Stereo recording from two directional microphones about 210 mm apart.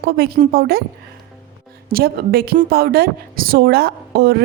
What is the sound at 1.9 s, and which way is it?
A woman's voice, 50° right (ahead or behind).